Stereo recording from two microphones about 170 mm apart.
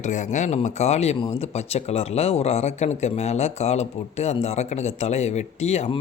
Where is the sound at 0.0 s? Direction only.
45° left (ahead or behind).